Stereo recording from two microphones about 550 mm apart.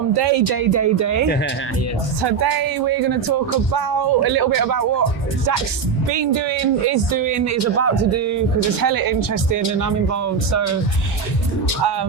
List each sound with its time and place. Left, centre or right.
0.2 s speech: right
0.7 s speech: right
6.1 s speech: right